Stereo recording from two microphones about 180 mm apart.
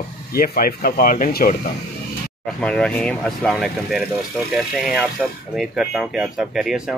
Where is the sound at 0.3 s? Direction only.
55° left (ahead or behind).